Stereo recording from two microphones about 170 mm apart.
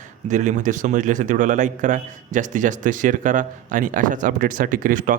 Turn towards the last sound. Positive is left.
turn(degrees=-50)  # may be behind; listen again after turning